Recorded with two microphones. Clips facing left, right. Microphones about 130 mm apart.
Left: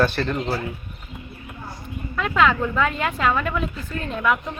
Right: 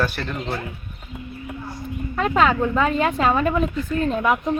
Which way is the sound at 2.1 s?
35° right (ahead or behind).